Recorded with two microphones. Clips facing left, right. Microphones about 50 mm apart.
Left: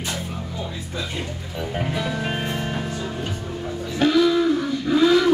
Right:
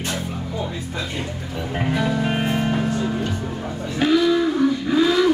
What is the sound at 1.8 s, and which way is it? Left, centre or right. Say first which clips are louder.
Music: right 4 dB; centre.